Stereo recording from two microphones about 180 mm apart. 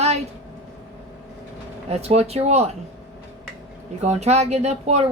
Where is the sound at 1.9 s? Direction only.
35° right (ahead or behind).